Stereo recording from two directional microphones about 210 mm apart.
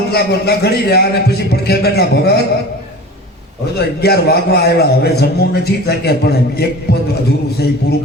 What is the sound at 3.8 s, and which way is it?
A man's voice, 50° left (ahead or behind).